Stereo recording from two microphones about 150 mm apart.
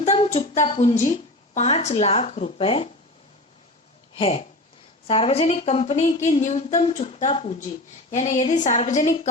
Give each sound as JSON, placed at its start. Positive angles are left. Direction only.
{"t": 0.0, "sound": "speech", "side_deg": 45}
{"t": 0.9, "sound": "a woman's voice", "side_deg": 55}
{"t": 4.2, "sound": "a woman's voice", "side_deg": 40}